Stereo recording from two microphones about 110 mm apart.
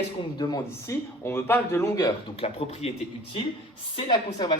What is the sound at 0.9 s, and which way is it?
Speech, 25° left (ahead or behind).